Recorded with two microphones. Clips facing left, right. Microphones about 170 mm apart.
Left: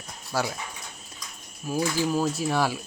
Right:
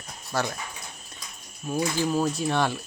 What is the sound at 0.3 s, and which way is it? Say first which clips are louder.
Speech: even; 5° left (ahead or behind).